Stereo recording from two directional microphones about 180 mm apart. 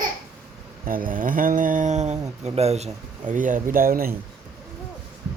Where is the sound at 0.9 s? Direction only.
50° right (ahead or behind).